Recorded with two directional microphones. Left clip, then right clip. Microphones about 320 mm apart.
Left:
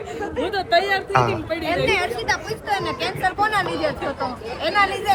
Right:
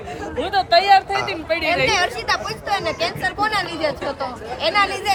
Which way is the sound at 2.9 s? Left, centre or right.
Centre.